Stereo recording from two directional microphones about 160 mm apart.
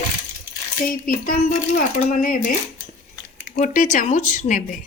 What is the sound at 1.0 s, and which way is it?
Speech, 60° left (ahead or behind).